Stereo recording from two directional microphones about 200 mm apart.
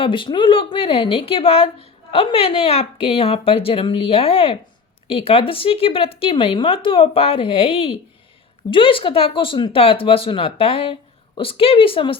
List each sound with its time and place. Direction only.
0.0 s speech: 25° left (ahead or behind)